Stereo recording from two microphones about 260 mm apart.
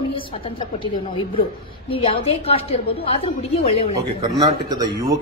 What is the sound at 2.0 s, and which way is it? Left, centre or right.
A woman's voice, left.